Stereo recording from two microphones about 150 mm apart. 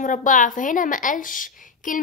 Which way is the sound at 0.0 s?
60° left (ahead or behind).